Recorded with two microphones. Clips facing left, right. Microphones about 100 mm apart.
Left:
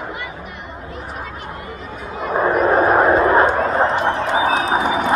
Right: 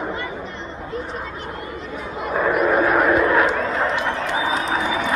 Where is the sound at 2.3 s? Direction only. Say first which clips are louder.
Left 3 dB; 35° left (ahead or behind).